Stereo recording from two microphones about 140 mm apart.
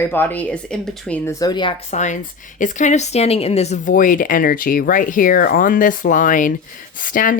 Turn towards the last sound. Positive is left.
turn(degrees=75)  # may be behind; listen again after turning